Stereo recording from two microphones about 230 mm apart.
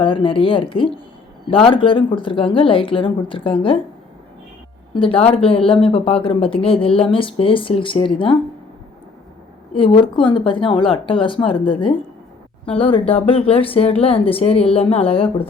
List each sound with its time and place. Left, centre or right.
0.0 s speech: left
4.9 s speech: left
9.7 s speech: left